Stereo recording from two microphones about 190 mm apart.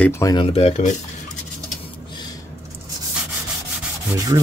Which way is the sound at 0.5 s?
35° left (ahead or behind).